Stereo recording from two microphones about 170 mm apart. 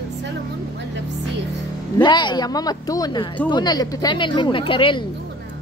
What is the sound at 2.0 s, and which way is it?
Speech, 25° left (ahead or behind).